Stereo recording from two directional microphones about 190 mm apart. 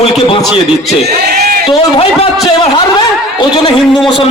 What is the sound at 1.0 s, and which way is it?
Speech, 55° right (ahead or behind).